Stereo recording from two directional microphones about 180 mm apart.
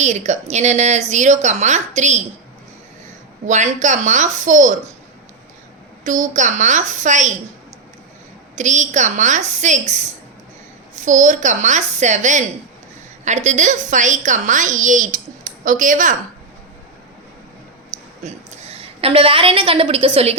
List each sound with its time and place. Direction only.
0.0 s a woman's voice: 40° right (ahead or behind)
3.4 s a woman's voice: 40° right (ahead or behind)
6.1 s a woman's voice: 45° right (ahead or behind)
8.5 s a woman's voice: 40° right (ahead or behind)
18.2 s a woman's voice: 35° right (ahead or behind)